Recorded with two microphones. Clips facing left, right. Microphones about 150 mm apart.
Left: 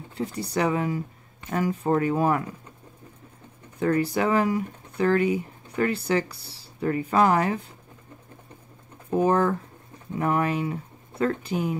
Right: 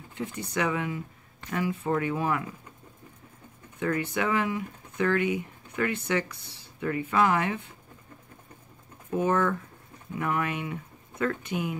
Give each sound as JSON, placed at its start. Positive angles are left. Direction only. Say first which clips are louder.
{"t": 0.1, "sound": "speech", "louder": "left 4 dB", "side_deg": 35}
{"t": 3.8, "sound": "speech", "louder": "left 5 dB", "side_deg": 35}
{"t": 9.1, "sound": "speech", "louder": "left 4 dB", "side_deg": 35}